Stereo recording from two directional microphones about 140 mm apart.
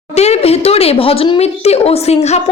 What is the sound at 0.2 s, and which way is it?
Speech, 50° left (ahead or behind).